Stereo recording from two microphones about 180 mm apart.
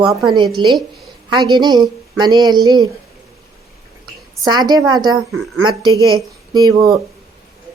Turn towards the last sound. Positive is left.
turn(degrees=-20)  # may be behind; listen again after turning